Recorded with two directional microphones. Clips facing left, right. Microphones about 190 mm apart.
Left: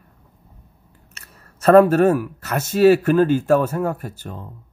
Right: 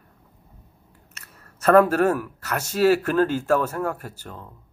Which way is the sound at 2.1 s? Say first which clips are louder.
Left 5 dB; 20° left (ahead or behind).